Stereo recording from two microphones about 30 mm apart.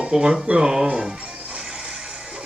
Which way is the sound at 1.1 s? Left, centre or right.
Right.